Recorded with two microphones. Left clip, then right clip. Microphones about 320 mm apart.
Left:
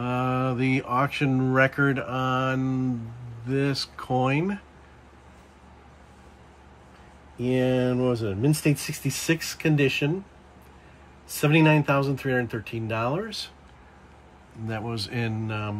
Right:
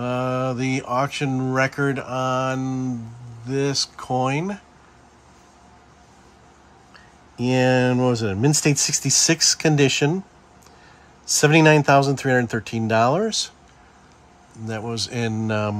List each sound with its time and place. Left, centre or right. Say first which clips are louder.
0.0 s speech: right 3 dB; centre
7.8 s speech: right 5 dB; right
11.2 s speech: right 6 dB; centre
14.7 s speech: right 4 dB; centre